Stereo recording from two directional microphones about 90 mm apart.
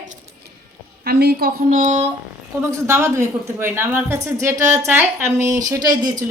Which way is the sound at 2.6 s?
30° right (ahead or behind).